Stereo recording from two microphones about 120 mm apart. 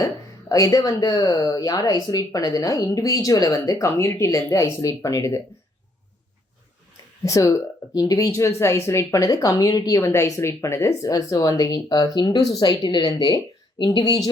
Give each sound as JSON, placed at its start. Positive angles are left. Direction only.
{"t": 0.0, "sound": "speech", "side_deg": 30}
{"t": 7.3, "sound": "speech", "side_deg": 25}